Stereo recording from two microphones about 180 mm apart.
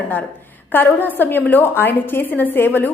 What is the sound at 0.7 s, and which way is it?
A woman's voice, 10° left (ahead or behind).